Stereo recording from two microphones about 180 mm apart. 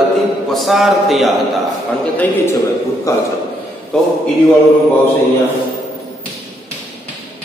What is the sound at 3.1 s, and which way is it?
Speech, 15° left (ahead or behind).